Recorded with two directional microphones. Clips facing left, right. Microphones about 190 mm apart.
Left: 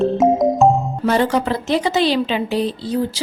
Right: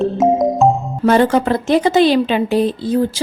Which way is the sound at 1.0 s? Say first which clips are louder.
Right 5 dB; 55° right (ahead or behind).